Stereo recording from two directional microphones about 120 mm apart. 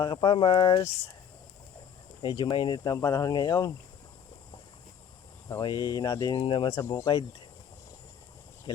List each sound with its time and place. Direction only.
0.0 s speech: 40° left (ahead or behind)
2.2 s speech: 40° left (ahead or behind)
5.5 s speech: 35° left (ahead or behind)
6.4 s speech: 45° left (ahead or behind)
6.7 s speech: 30° left (ahead or behind)